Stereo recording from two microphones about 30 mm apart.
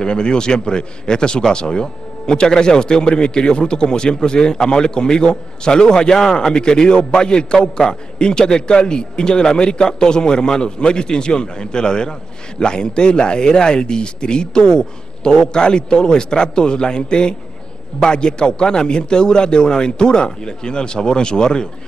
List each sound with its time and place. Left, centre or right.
0.0 s a man's voice: left